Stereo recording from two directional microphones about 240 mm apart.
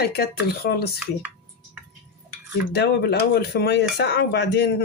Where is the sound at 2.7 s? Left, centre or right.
Left.